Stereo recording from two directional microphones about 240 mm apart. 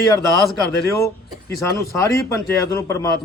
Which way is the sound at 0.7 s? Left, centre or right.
Centre.